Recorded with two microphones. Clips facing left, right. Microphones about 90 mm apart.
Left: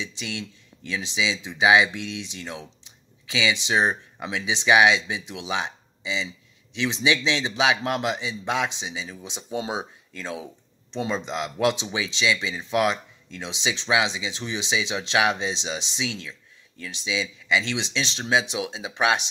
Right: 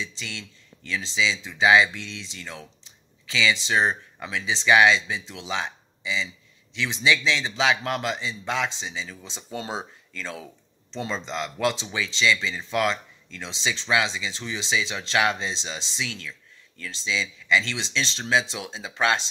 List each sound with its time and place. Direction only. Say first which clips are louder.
0.0 s speech: left 3 dB; 20° left (ahead or behind)